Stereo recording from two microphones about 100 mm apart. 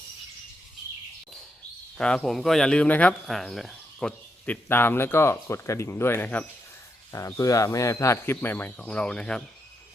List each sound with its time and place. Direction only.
2.0 s speech: 10° left (ahead or behind)
3.2 s speech: 5° left (ahead or behind)
4.4 s speech: 20° left (ahead or behind)
7.1 s speech: 35° left (ahead or behind); by 9.4 s 10° left (ahead or behind)